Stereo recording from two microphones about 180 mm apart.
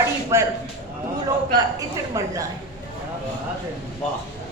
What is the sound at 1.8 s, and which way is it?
Speech, 20° right (ahead or behind).